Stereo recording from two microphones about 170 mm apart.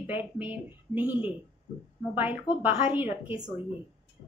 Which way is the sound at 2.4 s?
25° left (ahead or behind).